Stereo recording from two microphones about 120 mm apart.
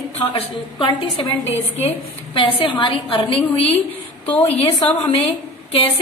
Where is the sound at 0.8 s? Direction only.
55° left (ahead or behind).